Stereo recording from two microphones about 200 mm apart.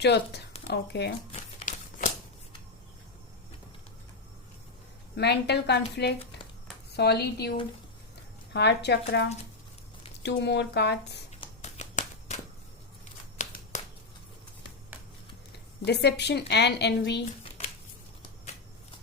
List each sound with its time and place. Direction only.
0.0 s a woman's voice: 55° left (ahead or behind)
1.3 s a sound: 40° left (ahead or behind)
5.1 s a woman's voice: 55° left (ahead or behind)
8.5 s a woman's voice: 55° left (ahead or behind)
10.2 s a woman's voice: 55° left (ahead or behind)
11.3 s a sound: 35° left (ahead or behind)
13.4 s shuffling cards: 35° left (ahead or behind)
15.8 s a woman's voice: 55° left (ahead or behind)